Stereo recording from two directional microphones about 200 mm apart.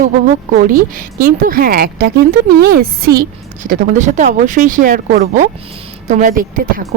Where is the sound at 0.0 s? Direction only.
40° right (ahead or behind).